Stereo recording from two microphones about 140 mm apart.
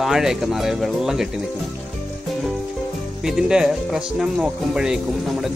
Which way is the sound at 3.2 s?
5° right (ahead or behind).